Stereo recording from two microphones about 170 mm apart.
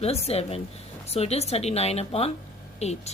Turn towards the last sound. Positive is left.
turn(degrees=40)  # may be behind; listen again after turning